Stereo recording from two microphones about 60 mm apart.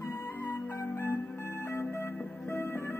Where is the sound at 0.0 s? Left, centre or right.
Left.